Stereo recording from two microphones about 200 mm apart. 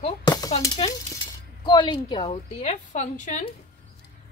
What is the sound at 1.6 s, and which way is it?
A woman's voice, 25° left (ahead or behind).